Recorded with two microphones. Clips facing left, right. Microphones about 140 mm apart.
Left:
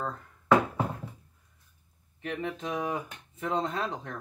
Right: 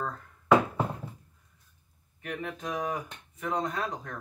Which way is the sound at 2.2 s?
25° left (ahead or behind).